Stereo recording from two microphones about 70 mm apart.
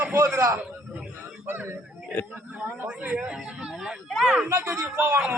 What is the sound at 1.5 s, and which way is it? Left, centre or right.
Speech, right.